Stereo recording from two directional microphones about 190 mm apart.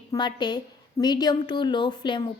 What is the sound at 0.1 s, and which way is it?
A woman's voice, 25° left (ahead or behind).